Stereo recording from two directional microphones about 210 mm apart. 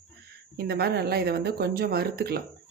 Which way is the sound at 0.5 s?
50° right (ahead or behind).